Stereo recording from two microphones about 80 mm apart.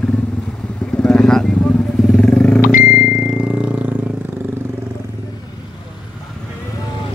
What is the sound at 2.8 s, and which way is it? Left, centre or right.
Vehicle, centre.